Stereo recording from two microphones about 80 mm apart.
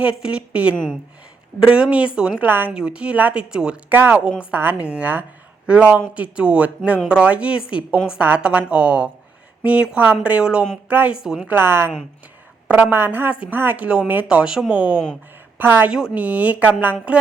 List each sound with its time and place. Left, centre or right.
0.0 s speech: centre
2.4 s speech: right
2.7 s speech: centre
3.9 s speech: right
11.2 s speech: centre
11.4 s a woman's voice: right
15.9 s speech: centre